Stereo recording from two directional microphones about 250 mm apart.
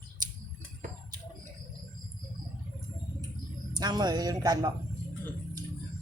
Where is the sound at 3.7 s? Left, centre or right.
Centre.